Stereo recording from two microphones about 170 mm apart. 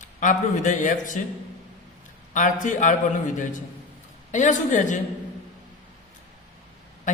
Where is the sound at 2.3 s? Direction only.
50° left (ahead or behind).